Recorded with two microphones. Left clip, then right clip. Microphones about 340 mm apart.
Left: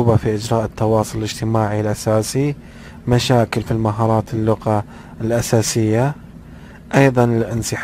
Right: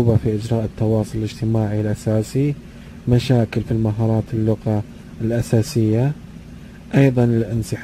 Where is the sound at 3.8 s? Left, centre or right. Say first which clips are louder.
Left 6 dB; left.